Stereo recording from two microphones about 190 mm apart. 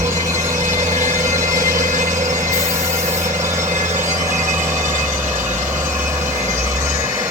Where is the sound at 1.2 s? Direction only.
15° right (ahead or behind).